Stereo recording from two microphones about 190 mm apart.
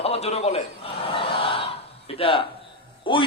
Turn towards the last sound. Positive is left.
turn(degrees=25)  # may be behind; listen again after turning